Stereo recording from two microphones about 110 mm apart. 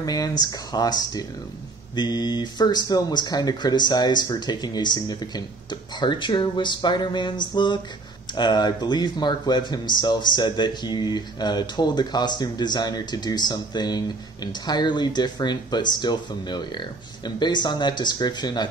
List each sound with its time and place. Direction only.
0.0 s speech: 35° left (ahead or behind)